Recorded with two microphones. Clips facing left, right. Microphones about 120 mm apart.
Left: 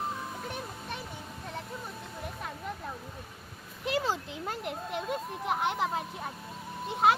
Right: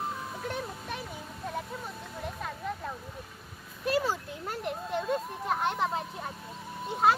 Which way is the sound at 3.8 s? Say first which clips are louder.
Right 2 dB; 15° left (ahead or behind).